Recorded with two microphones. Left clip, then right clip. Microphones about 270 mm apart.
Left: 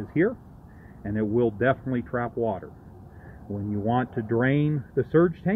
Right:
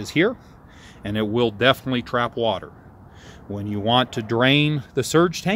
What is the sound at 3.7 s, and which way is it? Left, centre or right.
Speech, right.